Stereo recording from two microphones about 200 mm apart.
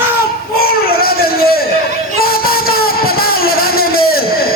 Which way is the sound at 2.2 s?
50° left (ahead or behind).